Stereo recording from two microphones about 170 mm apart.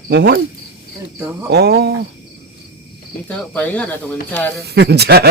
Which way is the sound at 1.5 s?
75° right (ahead or behind).